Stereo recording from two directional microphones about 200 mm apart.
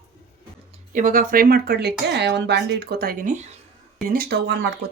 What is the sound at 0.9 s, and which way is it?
A woman's voice, 40° right (ahead or behind).